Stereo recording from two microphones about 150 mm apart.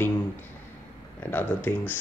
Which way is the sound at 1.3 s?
10° left (ahead or behind).